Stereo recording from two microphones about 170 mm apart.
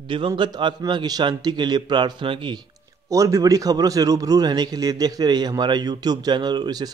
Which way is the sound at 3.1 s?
20° right (ahead or behind).